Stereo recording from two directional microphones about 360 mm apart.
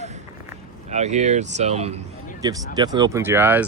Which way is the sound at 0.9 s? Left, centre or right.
Centre.